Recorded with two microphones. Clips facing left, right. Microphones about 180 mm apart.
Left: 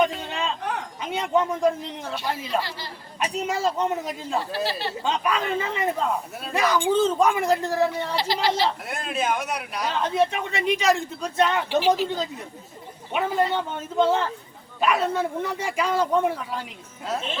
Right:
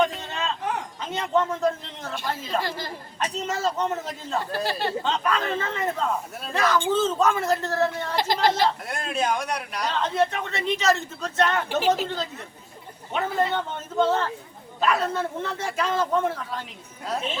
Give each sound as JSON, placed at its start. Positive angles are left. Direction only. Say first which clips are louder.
{"t": 0.0, "sound": "a sound", "louder": "left 1 dB", "side_deg": 10}
{"t": 1.1, "sound": "a man's voice", "louder": "left 1 dB", "side_deg": 10}
{"t": 2.6, "sound": "a woman's voice", "louder": "right 1 dB", "side_deg": -50}
{"t": 3.2, "sound": "a man's voice", "louder": "left 2 dB", "side_deg": 10}
{"t": 4.5, "sound": "a woman's voice", "louder": "right 1 dB", "side_deg": -50}
{"t": 5.0, "sound": "a man's voice", "louder": "left 4 dB", "side_deg": 10}
{"t": 8.1, "sound": "a woman's voice", "louder": "right 1 dB", "side_deg": -50}
{"t": 8.9, "sound": "a man's voice", "louder": "even", "side_deg": 0}